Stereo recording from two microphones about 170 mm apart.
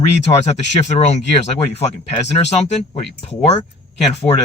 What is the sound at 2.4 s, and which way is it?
Speech, 30° left (ahead or behind).